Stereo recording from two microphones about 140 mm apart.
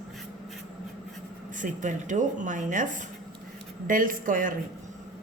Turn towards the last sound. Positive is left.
turn(degrees=-75)  # may be behind; listen again after turning